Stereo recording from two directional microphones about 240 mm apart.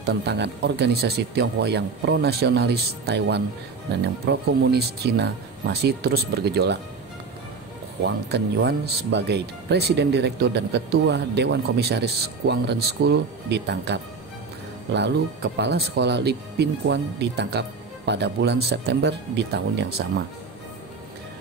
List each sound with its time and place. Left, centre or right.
0.0 s speech: right
8.0 s speech: right